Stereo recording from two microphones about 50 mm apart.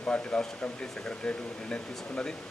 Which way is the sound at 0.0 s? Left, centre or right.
Left.